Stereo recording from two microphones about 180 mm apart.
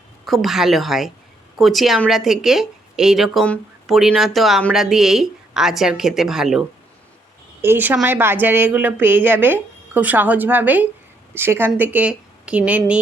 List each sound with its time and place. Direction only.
0.3 s a woman's voice: centre (ahead or behind)